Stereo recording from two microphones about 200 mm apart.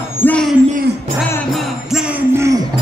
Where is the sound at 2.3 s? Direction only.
15° right (ahead or behind).